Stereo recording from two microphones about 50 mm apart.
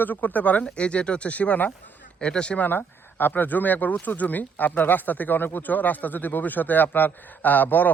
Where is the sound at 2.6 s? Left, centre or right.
Left.